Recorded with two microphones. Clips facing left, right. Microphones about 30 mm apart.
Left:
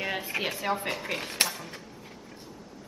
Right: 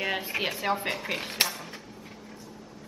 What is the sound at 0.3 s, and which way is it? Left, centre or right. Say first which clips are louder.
Speech: right 1 dB; centre.